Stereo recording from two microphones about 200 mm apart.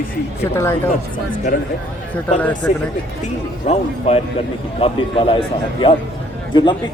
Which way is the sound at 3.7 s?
30° left (ahead or behind).